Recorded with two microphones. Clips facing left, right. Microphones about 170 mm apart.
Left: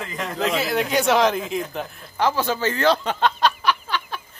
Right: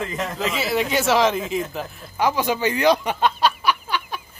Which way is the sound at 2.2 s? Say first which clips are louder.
Right 1 dB; 15° right (ahead or behind).